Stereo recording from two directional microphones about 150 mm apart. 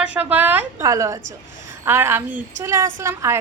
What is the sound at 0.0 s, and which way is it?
A woman's voice, 10° right (ahead or behind).